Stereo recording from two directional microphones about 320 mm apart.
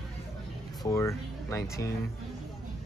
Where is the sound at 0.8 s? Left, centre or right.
Centre.